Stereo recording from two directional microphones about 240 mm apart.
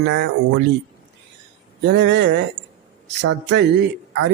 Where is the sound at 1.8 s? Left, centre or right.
Right.